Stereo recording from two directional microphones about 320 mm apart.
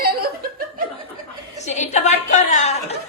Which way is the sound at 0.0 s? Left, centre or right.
Right.